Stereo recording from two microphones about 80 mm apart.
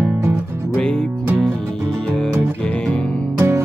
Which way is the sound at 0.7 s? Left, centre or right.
Centre.